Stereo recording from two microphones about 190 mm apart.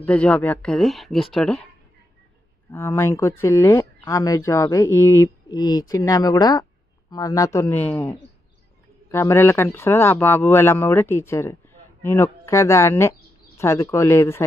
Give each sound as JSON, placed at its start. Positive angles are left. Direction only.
{"t": 0.0, "sound": "speech", "side_deg": 5}
{"t": 2.7, "sound": "speech", "side_deg": 15}